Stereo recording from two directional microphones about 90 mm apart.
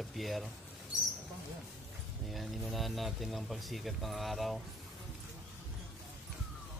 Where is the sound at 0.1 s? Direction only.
Centre (ahead or behind).